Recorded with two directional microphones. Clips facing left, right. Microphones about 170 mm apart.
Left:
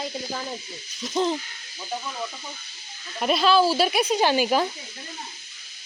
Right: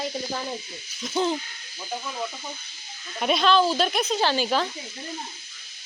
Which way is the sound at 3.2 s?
Centre (ahead or behind).